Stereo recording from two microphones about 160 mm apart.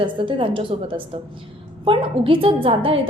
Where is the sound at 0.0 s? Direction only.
30° right (ahead or behind).